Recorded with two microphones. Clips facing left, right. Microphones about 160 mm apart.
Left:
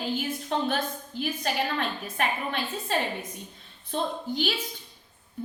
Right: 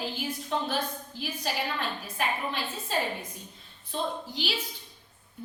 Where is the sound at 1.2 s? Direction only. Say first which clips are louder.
Left 4 dB; 55° left (ahead or behind).